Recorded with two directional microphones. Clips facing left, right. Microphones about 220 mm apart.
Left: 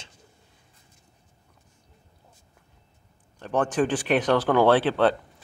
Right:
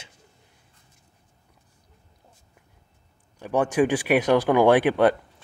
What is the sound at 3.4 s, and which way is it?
Speech, 10° right (ahead or behind).